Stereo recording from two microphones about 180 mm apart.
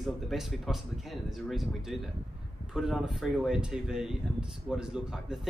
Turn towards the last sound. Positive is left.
turn(degrees=-5)  # may be behind; listen again after turning